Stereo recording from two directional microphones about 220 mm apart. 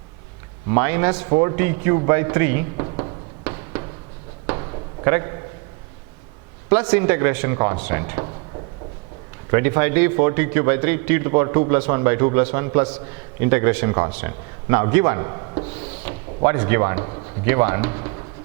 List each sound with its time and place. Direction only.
0.8 s a man's voice: 15° right (ahead or behind)
2.8 s a sound: 25° right (ahead or behind)
6.7 s a man's voice: 15° right (ahead or behind)
9.5 s a man's voice: 15° right (ahead or behind)